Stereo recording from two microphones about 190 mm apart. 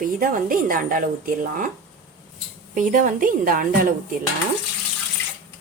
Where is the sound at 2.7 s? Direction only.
45° right (ahead or behind).